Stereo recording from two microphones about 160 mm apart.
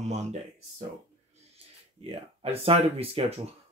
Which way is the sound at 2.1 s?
35° right (ahead or behind).